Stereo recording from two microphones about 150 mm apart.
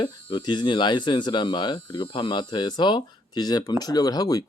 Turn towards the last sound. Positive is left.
turn(degrees=25)  # may be behind; listen again after turning